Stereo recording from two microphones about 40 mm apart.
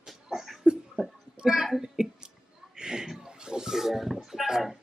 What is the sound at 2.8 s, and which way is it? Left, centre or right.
Chuckle, centre.